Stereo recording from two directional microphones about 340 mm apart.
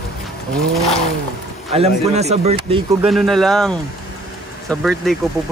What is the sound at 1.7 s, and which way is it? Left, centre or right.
A man's voice, centre.